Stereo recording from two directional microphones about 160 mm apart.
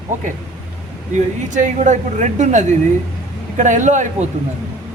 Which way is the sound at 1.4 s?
50° right (ahead or behind).